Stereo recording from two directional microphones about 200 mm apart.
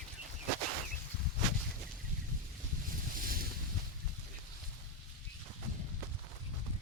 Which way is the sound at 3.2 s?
45° right (ahead or behind).